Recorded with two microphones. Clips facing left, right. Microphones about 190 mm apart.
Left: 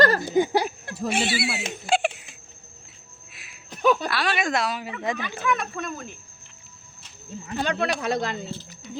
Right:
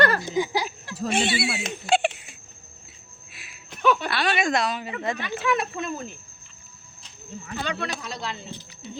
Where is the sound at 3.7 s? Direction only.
40° left (ahead or behind).